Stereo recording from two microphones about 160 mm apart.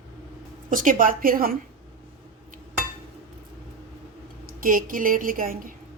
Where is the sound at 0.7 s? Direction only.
55° right (ahead or behind).